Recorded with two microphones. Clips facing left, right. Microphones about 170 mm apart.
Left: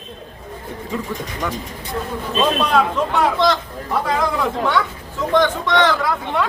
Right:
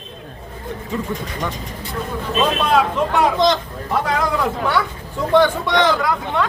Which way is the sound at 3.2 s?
15° right (ahead or behind).